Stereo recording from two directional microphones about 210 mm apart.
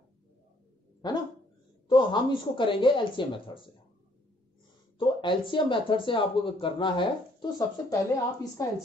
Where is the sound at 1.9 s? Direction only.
20° left (ahead or behind).